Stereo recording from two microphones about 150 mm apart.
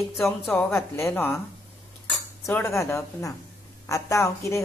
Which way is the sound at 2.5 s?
15° left (ahead or behind).